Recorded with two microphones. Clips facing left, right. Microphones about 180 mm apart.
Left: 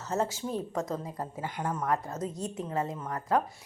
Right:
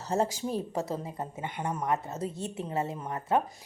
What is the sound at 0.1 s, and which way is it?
Speech, 15° right (ahead or behind).